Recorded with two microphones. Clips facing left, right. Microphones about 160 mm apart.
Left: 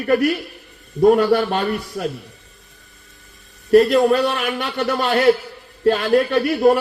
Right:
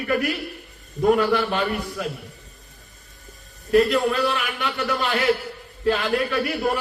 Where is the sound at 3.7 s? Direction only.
45° left (ahead or behind).